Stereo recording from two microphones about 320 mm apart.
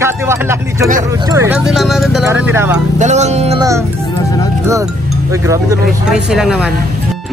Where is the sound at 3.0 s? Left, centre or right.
Right.